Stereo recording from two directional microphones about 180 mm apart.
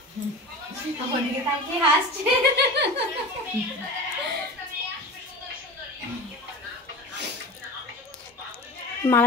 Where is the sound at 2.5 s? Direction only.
70° right (ahead or behind).